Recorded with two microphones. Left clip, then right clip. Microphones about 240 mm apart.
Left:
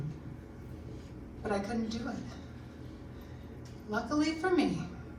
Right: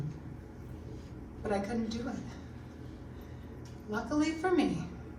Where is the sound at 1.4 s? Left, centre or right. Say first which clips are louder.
Even; centre.